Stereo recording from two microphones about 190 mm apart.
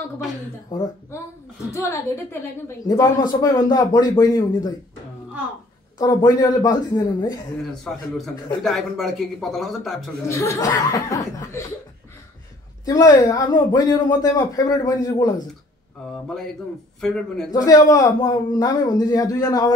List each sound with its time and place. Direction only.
0.7 s speech: 20° left (ahead or behind)
5.9 s speech: 20° left (ahead or behind)
7.7 s speech: centre (ahead or behind)
10.2 s speech: 15° left (ahead or behind)
12.8 s speech: 20° left (ahead or behind)
17.0 s speech: 5° left (ahead or behind)
17.5 s speech: 20° left (ahead or behind)